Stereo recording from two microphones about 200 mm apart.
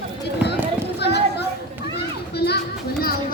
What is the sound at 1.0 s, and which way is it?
Chatter, 55° left (ahead or behind).